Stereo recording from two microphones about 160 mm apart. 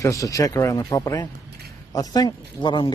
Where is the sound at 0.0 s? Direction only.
20° left (ahead or behind).